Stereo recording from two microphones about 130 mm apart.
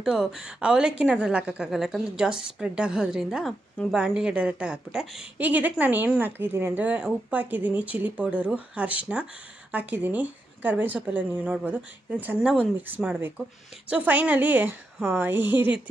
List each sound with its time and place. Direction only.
0.0 s a woman's voice: 5° right (ahead or behind)